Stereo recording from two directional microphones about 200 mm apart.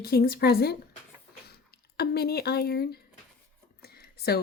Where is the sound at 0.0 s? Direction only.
50° left (ahead or behind).